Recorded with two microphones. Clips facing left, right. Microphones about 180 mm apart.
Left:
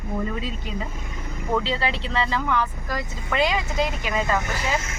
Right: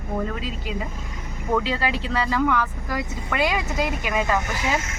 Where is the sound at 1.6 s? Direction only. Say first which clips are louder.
Right 1 dB; 10° right (ahead or behind).